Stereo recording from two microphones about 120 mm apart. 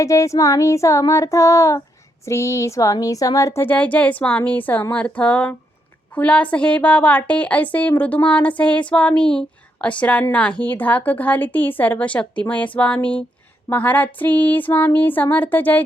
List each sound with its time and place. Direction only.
0.0 s child singing: 25° left (ahead or behind)
2.2 s speech: 25° left (ahead or behind)